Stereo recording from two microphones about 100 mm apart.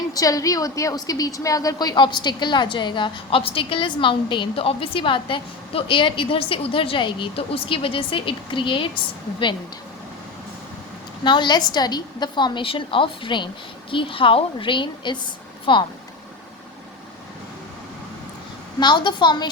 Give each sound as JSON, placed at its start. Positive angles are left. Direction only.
{"t": 0.1, "sound": "a woman's voice", "side_deg": 35}
{"t": 11.2, "sound": "a woman's voice", "side_deg": 50}
{"t": 18.8, "sound": "a woman's voice", "side_deg": 50}